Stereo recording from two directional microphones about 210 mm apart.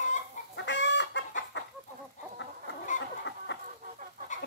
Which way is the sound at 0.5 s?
55° left (ahead or behind).